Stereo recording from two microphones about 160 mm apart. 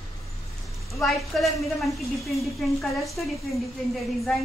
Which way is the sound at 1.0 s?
Centre (ahead or behind).